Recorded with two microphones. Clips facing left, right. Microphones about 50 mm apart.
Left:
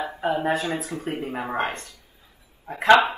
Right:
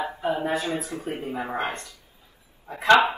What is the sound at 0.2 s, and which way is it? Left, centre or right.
Speech, left.